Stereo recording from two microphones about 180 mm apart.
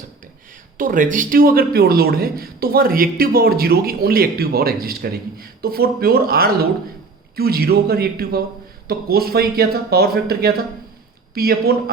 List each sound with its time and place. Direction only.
0.8 s a man's voice: 50° right (ahead or behind)